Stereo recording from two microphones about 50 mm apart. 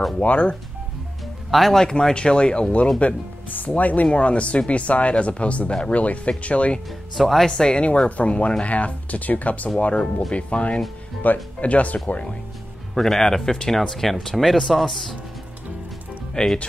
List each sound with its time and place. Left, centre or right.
0.2 s speech: left
1.5 s speech: centre
3.0 s speech: left
7.2 s speech: centre
7.5 s speech: centre
12.9 s speech: centre
16.4 s speech: left